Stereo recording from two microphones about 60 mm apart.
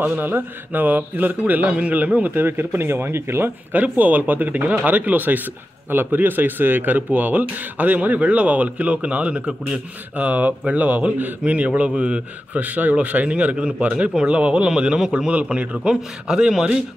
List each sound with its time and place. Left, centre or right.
0.0 s speech: right
2.3 s speech: right
3.7 s speech: right